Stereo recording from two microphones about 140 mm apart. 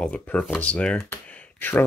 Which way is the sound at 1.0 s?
10° left (ahead or behind).